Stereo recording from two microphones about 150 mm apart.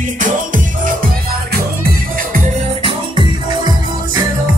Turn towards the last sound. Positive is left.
turn(degrees=-30)  # may be behind; listen again after turning